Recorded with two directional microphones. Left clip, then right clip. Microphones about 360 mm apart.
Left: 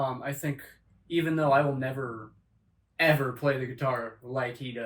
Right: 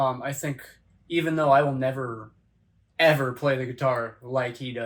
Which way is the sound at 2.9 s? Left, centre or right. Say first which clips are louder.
Right 4 dB; centre.